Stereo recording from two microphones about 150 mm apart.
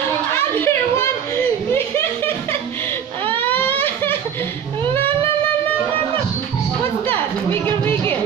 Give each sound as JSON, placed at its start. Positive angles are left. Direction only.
{"t": 0.6, "sound": "a sound", "side_deg": 15}
{"t": 3.3, "sound": "baby cry", "side_deg": 10}
{"t": 7.2, "sound": "chatter", "side_deg": 10}